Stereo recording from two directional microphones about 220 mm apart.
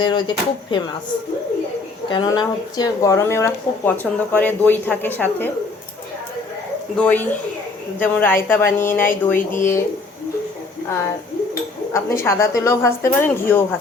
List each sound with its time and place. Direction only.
0.0 s speech: 20° left (ahead or behind)
2.0 s speech: 20° left (ahead or behind)
6.9 s speech: 5° left (ahead or behind)
11.9 s speech: 10° left (ahead or behind)